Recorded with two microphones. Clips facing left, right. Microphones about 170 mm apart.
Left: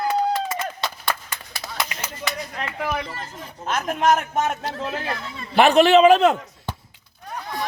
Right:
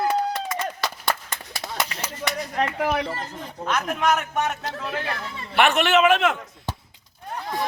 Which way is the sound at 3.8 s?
35° left (ahead or behind).